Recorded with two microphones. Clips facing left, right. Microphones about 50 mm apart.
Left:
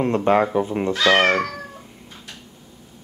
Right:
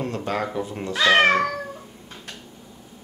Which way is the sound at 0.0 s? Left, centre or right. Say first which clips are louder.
Left 9 dB; left.